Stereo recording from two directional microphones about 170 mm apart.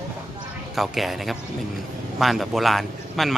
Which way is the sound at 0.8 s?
Centre (ahead or behind).